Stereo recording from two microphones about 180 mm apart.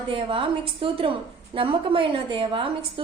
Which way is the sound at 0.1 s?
30° right (ahead or behind).